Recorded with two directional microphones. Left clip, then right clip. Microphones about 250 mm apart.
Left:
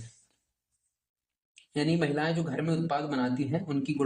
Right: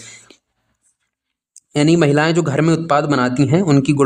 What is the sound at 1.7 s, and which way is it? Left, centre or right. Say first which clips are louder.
Speech: right 15 dB; right.